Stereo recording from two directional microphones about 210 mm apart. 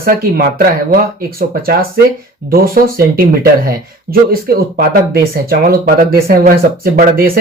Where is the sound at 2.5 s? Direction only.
45° right (ahead or behind).